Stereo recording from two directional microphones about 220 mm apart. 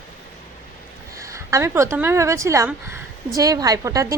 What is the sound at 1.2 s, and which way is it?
Speech, 15° right (ahead or behind).